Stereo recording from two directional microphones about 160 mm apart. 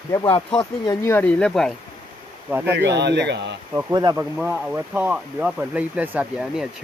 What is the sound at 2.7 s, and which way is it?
Speech, 90° right.